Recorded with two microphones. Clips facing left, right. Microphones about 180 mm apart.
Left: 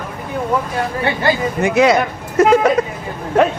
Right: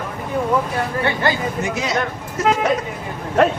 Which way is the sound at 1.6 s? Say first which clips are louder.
Left 13 dB; 65° left (ahead or behind).